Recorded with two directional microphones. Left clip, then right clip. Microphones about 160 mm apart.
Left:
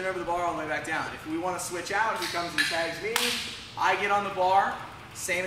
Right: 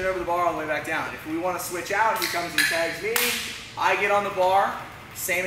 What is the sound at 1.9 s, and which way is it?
Speech, 20° left (ahead or behind).